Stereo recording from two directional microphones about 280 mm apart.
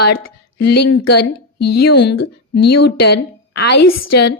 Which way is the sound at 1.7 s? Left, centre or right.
Left.